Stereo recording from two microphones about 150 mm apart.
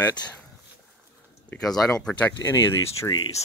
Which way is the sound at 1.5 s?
5° left (ahead or behind).